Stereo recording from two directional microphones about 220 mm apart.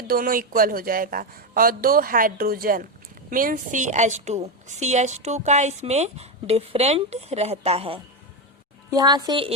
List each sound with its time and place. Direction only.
0.1 s a woman's voice: 40° right (ahead or behind); by 9.5 s 20° right (ahead or behind)